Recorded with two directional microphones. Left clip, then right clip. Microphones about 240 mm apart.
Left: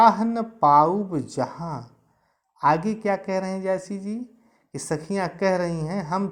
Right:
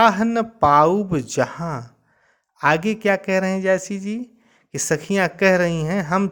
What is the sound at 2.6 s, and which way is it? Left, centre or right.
Speech, right.